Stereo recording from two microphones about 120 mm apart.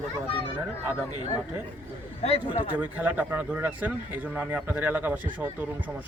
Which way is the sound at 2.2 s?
55° left (ahead or behind).